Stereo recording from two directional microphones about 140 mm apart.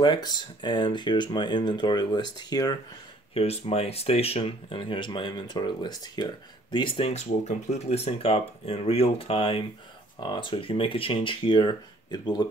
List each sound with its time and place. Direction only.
0.0 s speech: 30° left (ahead or behind)
3.3 s speech: 45° left (ahead or behind); by 12.4 s 30° left (ahead or behind)